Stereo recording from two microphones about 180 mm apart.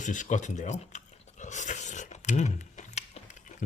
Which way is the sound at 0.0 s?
45° left (ahead or behind).